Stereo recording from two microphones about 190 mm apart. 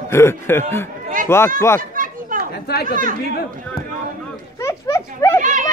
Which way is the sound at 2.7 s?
55° left (ahead or behind).